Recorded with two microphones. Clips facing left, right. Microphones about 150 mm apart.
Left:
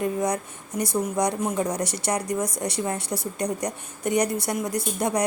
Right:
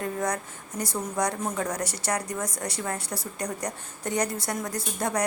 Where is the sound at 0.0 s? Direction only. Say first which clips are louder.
Left 4 dB; 15° left (ahead or behind).